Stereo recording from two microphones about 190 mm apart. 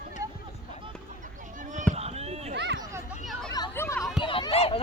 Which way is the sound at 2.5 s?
65° right (ahead or behind).